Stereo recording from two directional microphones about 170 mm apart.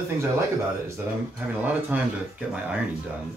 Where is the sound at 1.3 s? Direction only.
10° right (ahead or behind).